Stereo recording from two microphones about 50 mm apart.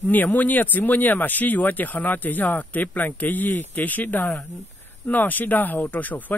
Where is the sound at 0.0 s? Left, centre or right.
Left.